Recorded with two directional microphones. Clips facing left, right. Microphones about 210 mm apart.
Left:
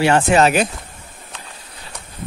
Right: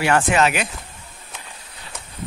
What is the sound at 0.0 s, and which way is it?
Speech, 30° left (ahead or behind).